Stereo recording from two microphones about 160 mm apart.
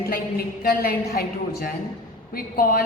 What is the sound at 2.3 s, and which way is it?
Speech, 65° left (ahead or behind).